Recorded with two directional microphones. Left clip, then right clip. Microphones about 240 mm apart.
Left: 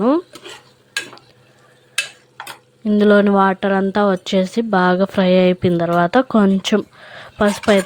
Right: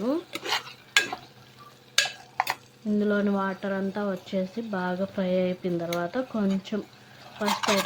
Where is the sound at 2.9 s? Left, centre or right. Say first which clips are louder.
Left 13 dB; left.